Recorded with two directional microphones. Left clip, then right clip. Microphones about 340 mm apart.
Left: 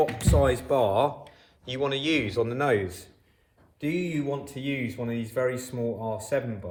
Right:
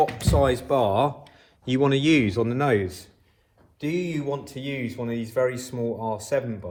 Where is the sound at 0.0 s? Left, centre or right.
Centre.